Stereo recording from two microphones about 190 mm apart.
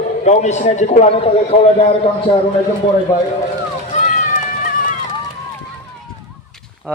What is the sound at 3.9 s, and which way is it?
Run, 40° left (ahead or behind).